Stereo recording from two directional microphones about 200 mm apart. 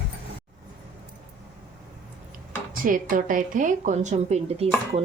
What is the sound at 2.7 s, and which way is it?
A woman's voice, 45° right (ahead or behind).